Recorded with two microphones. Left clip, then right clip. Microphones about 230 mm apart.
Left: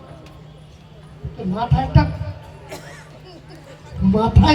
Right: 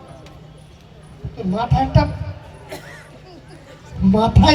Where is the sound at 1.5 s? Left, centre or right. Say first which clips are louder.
Right 2 dB; right.